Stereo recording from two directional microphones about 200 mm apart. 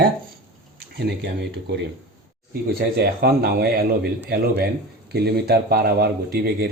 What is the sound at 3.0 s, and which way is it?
Speech, 55° right (ahead or behind).